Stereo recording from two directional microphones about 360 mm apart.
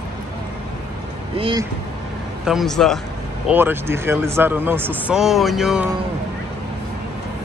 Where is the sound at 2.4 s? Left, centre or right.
Centre.